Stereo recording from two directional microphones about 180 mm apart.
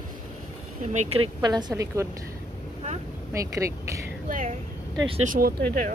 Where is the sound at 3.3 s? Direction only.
15° right (ahead or behind).